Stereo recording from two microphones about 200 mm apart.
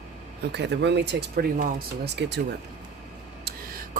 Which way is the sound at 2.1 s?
60° right (ahead or behind).